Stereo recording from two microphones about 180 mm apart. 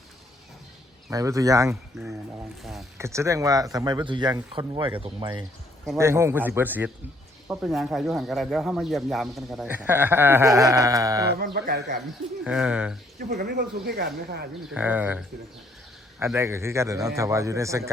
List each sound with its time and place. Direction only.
1.1 s speech: 20° right (ahead or behind)
3.0 s speech: 15° right (ahead or behind)
6.0 s speech: 15° right (ahead or behind)
11.5 s speech: 65° right (ahead or behind)
12.5 s speech: 5° right (ahead or behind)
13.1 s speech: 65° right (ahead or behind)
14.7 s speech: 10° right (ahead or behind)
16.2 s speech: 15° right (ahead or behind)